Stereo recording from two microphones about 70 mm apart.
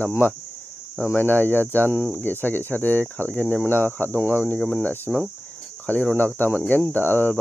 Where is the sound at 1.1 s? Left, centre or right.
Left.